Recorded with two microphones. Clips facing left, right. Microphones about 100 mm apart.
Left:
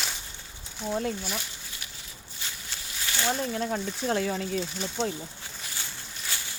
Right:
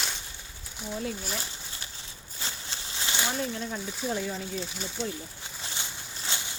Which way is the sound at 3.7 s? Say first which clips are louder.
Left 4 dB; 70° left (ahead or behind).